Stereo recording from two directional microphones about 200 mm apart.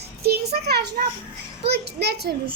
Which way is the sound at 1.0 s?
40° right (ahead or behind).